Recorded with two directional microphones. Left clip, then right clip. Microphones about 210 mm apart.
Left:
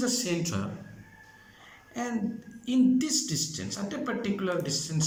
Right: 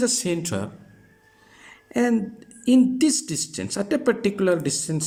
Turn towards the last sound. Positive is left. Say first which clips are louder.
# right 5 dB
turn(degrees=-45)  # may be behind; listen again after turning